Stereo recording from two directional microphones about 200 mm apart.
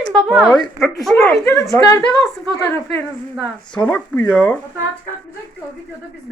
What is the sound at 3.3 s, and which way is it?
Speech, 5° left (ahead or behind).